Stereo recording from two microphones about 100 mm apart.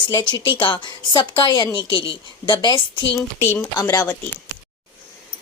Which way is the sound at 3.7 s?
40° left (ahead or behind).